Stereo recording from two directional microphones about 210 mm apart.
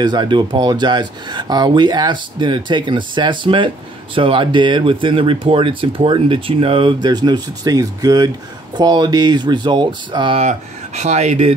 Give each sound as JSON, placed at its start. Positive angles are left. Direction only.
{"t": 0.0, "sound": "speech", "side_deg": -20}